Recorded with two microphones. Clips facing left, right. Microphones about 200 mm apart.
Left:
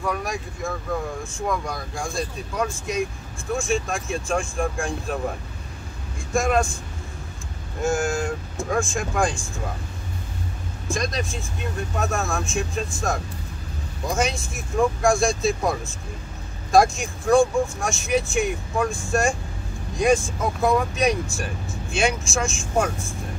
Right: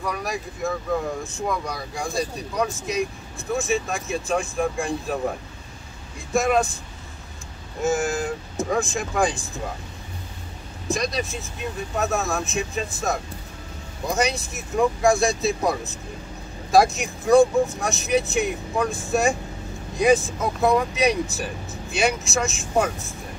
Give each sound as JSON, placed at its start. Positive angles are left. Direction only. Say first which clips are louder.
{"t": 0.0, "sound": "speech", "louder": "left 1 dB", "side_deg": 0}
{"t": 6.3, "sound": "speech", "louder": "right 1 dB", "side_deg": 0}
{"t": 7.8, "sound": "speech", "louder": "even", "side_deg": 0}
{"t": 10.9, "sound": "speech", "louder": "right 1 dB", "side_deg": 0}
{"t": 18.9, "sound": "speech", "louder": "even", "side_deg": -20}
{"t": 20.0, "sound": "speech", "louder": "right 1 dB", "side_deg": 0}